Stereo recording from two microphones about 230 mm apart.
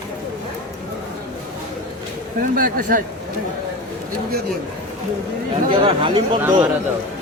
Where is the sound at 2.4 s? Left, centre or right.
Right.